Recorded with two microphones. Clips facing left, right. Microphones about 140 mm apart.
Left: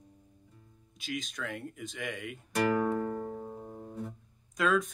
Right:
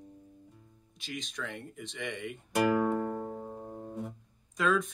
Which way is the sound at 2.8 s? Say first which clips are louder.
Right 1 dB; 10° right (ahead or behind).